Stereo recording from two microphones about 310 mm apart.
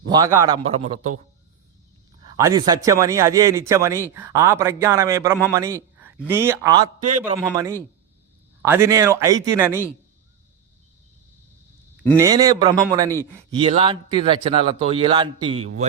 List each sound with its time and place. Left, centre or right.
0.0 s speech: centre
2.3 s a man's voice: centre
12.1 s speech: centre